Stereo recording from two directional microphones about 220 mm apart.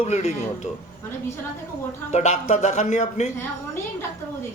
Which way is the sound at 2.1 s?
35° left (ahead or behind).